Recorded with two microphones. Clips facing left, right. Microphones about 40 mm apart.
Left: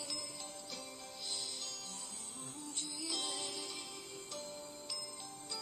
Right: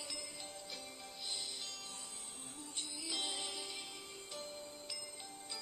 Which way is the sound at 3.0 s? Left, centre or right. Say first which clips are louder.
Even; centre.